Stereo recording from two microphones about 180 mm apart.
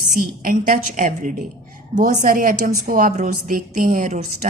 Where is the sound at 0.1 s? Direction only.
45° right (ahead or behind).